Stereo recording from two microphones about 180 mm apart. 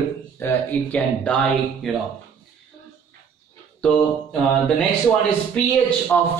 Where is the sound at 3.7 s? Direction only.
5° left (ahead or behind).